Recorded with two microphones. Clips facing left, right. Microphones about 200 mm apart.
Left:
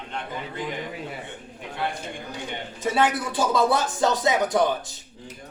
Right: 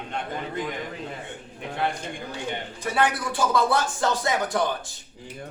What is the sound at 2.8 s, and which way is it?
Speech, 20° left (ahead or behind).